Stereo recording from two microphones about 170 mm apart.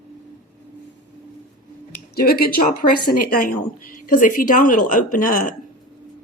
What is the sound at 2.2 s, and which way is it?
A woman's voice, 65° left (ahead or behind).